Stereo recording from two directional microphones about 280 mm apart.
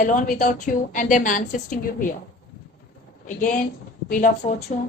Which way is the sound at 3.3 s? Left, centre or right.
Left.